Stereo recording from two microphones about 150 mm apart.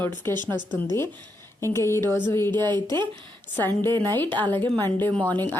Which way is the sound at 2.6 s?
30° right (ahead or behind).